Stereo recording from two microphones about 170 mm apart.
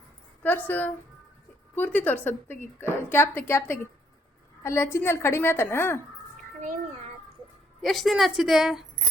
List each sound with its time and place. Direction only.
0.4 s a woman's voice: 10° left (ahead or behind)
6.6 s a child's voice: 50° right (ahead or behind)
7.8 s a woman's voice: centre (ahead or behind)